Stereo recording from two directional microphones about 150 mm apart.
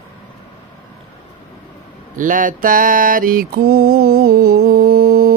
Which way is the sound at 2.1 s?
60° right (ahead or behind).